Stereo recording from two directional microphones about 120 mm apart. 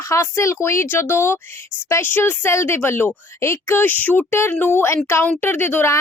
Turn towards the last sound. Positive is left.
turn(degrees=20)  # may be behind; listen again after turning